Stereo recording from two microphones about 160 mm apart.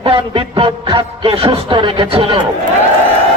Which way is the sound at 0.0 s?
35° right (ahead or behind).